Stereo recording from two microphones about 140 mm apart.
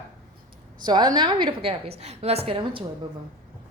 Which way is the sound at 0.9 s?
30° right (ahead or behind).